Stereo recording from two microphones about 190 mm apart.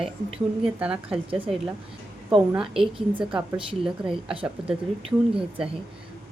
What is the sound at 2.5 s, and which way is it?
Speech, 5° right (ahead or behind).